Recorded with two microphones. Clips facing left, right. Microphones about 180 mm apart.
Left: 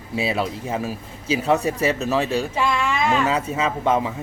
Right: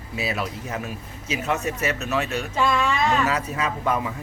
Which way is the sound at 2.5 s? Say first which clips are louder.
Even; 10° left (ahead or behind).